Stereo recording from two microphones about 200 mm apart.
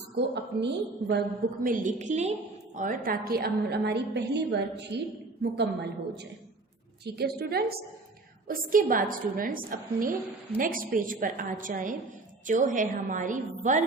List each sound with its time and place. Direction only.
0.2 s a woman's voice: 60° right (ahead or behind)
1.6 s a woman's voice: 40° right (ahead or behind); by 5.9 s 55° right (ahead or behind)
7.0 s a woman's voice: 50° right (ahead or behind)